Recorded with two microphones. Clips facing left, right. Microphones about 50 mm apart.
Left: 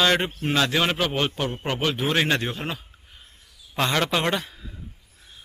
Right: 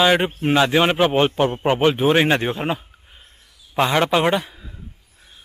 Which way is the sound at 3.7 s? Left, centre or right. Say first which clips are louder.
Right 6 dB; centre.